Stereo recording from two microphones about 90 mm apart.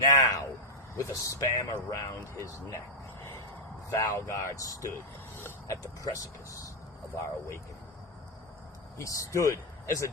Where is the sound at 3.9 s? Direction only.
40° left (ahead or behind).